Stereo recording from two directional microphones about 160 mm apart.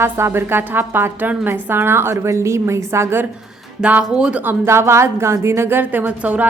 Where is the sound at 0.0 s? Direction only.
15° right (ahead or behind).